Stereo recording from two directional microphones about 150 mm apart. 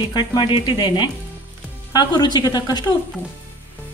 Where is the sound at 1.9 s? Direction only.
30° left (ahead or behind).